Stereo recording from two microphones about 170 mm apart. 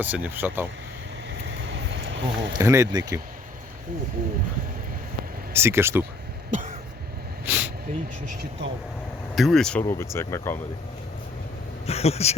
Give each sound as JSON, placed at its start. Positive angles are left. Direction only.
{"t": 0.0, "sound": "speech", "side_deg": -10}
{"t": 1.3, "sound": "a sound", "side_deg": -90}
{"t": 2.5, "sound": "speech", "side_deg": -20}
{"t": 5.5, "sound": "speech", "side_deg": -15}
{"t": 6.5, "sound": "cough", "side_deg": -50}
{"t": 7.4, "sound": "a sound", "side_deg": -10}
{"t": 9.3, "sound": "speech", "side_deg": 0}
{"t": 9.8, "sound": "speech", "side_deg": 15}
{"t": 11.9, "sound": "speech", "side_deg": 35}